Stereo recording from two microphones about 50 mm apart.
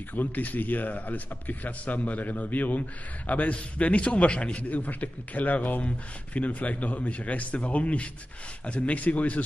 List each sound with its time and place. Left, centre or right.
0.1 s a man's voice: left